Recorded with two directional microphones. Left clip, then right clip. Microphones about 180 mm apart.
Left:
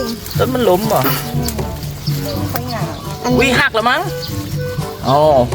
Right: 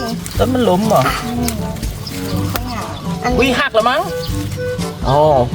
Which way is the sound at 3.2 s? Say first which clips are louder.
Left 2 dB; 15° left (ahead or behind).